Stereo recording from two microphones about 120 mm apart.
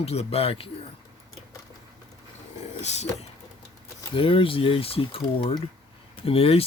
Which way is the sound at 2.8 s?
70° left (ahead or behind).